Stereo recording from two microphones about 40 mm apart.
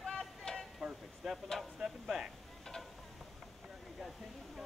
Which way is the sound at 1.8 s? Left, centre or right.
Centre.